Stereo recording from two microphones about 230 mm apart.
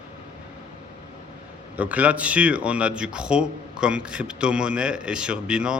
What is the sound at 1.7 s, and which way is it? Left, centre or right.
Speech, centre.